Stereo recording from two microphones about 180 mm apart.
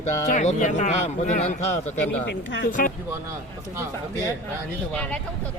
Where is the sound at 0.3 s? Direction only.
45° left (ahead or behind).